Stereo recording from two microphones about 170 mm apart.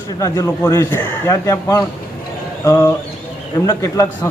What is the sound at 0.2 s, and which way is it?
A man's voice, 20° left (ahead or behind).